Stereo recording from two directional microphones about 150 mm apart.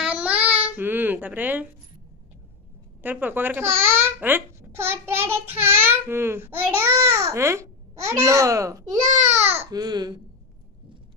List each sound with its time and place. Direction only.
0.0 s babbling: 5° right (ahead or behind)
3.0 s speech: 10° right (ahead or behind)
9.1 s a child's voice: 50° right (ahead or behind)
9.7 s speech: 25° right (ahead or behind)